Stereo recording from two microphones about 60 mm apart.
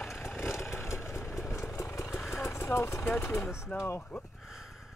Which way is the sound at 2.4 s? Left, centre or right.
Left.